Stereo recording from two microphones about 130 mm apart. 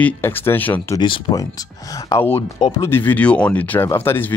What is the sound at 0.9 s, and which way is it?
Speech, 35° left (ahead or behind).